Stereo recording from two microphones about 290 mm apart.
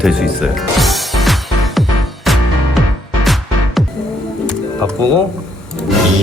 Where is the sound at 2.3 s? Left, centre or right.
Centre.